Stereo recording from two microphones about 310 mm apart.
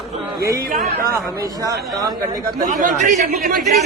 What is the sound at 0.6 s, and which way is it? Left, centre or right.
Speech, right.